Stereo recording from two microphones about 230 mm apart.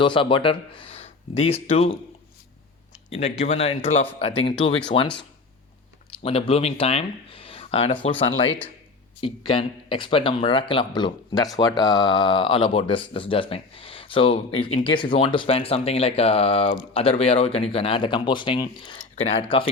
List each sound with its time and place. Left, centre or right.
0.0 s speech: left
3.1 s speech: left
6.2 s speech: left
9.2 s speech: left